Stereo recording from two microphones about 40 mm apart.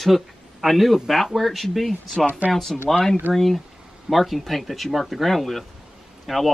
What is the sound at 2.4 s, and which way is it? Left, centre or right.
Speech, right.